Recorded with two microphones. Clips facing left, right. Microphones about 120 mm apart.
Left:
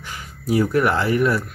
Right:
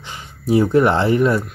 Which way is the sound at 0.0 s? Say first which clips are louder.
Right 3 dB; 25° right (ahead or behind).